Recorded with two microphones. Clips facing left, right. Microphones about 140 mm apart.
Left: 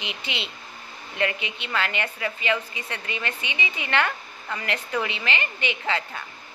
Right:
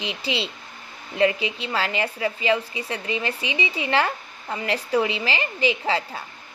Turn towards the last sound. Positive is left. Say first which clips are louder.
# right 3 dB
turn(degrees=-30)  # may be behind; listen again after turning